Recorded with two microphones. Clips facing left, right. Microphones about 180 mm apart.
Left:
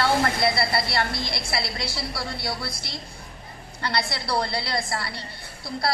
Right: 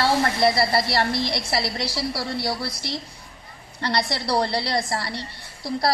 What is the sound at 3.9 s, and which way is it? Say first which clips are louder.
A woman's voice: right 3 dB; 40° right (ahead or behind).